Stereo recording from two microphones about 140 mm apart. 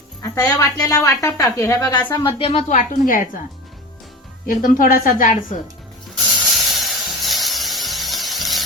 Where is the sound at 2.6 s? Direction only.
65° left (ahead or behind).